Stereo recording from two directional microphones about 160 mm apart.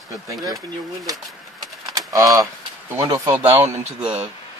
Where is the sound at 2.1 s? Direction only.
20° right (ahead or behind).